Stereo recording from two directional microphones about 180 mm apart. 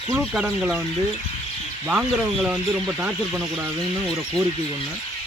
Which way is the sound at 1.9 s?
5° right (ahead or behind).